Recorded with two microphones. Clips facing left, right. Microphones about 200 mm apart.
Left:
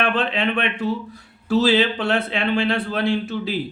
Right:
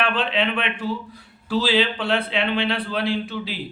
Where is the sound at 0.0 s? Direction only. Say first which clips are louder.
Left 1 dB; 45° left (ahead or behind).